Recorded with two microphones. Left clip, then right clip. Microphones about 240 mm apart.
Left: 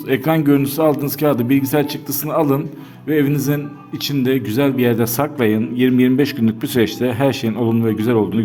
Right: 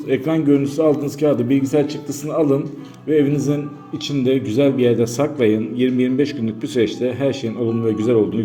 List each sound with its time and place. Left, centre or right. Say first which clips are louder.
0.1 s a man's voice: left 1 dB; left